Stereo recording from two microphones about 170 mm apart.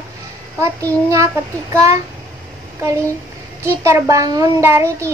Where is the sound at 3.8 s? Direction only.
15° right (ahead or behind).